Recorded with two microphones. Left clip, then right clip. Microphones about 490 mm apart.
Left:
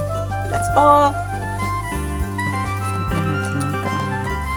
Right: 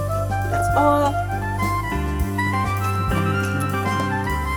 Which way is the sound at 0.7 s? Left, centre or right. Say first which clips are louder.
Left 6 dB; right.